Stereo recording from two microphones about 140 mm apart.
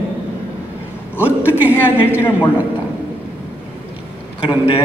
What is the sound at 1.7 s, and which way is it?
Speech, 15° left (ahead or behind).